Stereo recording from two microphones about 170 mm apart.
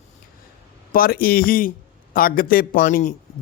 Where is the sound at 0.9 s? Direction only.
60° left (ahead or behind).